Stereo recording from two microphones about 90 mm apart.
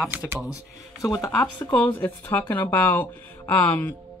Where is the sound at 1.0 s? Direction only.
40° left (ahead or behind).